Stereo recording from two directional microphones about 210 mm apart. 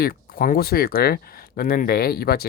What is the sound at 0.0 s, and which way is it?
Speech, 45° left (ahead or behind).